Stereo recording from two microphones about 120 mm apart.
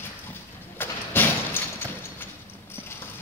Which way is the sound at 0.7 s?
20° left (ahead or behind).